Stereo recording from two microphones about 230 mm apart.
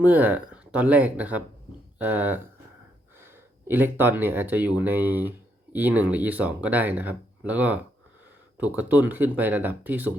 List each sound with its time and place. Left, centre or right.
0.0 s speech: centre
3.7 s speech: centre